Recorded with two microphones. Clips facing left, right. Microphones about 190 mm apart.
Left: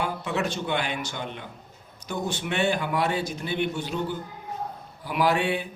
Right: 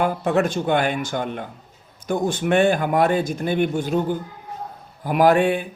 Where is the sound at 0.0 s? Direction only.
50° right (ahead or behind).